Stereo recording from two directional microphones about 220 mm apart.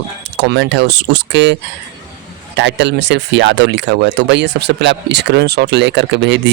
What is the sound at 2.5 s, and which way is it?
A man's voice, 55° right (ahead or behind).